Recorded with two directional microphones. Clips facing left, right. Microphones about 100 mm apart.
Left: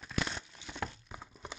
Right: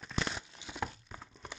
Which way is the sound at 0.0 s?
5° right (ahead or behind).